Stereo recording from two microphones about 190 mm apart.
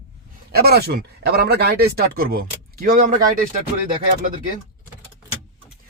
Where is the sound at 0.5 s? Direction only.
55° right (ahead or behind).